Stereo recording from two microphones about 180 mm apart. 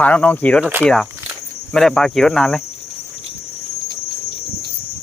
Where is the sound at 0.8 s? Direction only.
5° left (ahead or behind).